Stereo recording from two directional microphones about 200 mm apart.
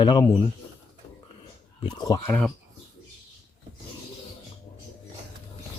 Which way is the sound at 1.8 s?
20° left (ahead or behind).